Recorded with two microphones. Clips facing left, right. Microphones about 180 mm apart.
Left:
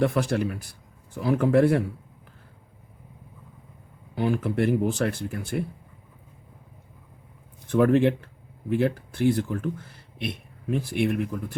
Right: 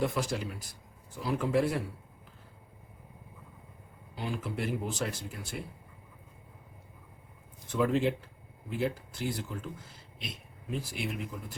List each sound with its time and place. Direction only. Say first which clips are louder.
0.0 s speech: left 8 dB; 60° left (ahead or behind)
4.1 s speech: left 11 dB; 60° left (ahead or behind)
7.7 s speech: left 8 dB; 60° left (ahead or behind)